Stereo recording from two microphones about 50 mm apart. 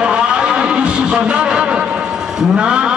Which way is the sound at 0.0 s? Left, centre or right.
Centre.